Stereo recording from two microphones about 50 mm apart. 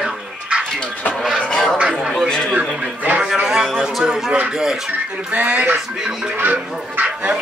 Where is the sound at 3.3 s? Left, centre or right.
Centre.